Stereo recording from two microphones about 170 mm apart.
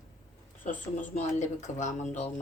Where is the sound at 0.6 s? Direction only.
50° left (ahead or behind).